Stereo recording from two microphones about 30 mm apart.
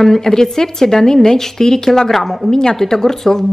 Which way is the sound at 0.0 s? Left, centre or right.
Centre.